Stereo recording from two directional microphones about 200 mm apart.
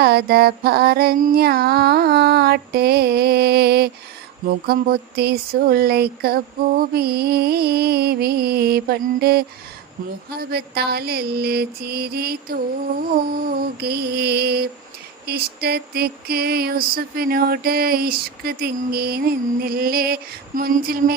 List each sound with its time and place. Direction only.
0.0 s mantra: 50° right (ahead or behind)